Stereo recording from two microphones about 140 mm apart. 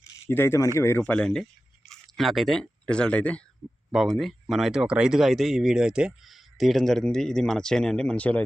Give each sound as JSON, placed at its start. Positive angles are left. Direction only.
{"t": 0.1, "sound": "speech", "side_deg": 15}